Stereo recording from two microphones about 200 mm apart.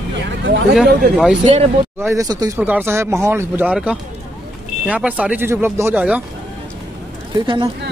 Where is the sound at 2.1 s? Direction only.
15° right (ahead or behind).